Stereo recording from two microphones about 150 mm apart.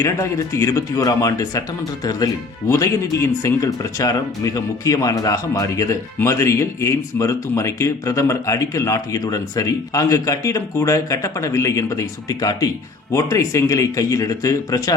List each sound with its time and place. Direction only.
0.0 s speech: 20° left (ahead or behind)